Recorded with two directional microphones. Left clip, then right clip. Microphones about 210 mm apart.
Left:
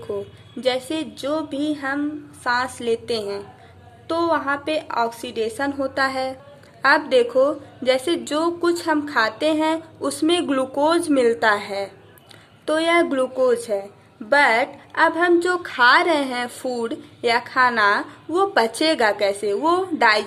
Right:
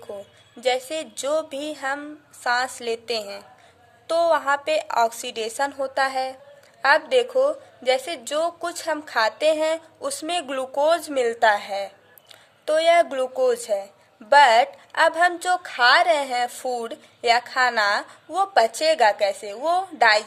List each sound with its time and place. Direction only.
0.6 s a woman's voice: 30° right (ahead or behind)